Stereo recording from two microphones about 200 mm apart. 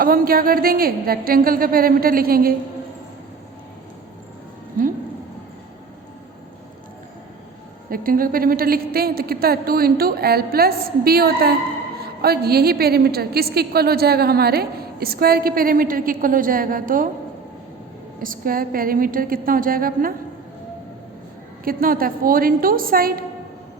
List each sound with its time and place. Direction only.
0.0 s a woman's voice: 45° right (ahead or behind)
4.8 s speech: 40° right (ahead or behind)
7.9 s a woman's voice: 45° right (ahead or behind)
18.2 s a woman's voice: 45° right (ahead or behind)
21.6 s a woman's voice: 45° right (ahead or behind)